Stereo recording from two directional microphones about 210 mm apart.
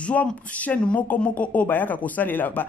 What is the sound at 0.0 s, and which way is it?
A woman's voice, 5° left (ahead or behind).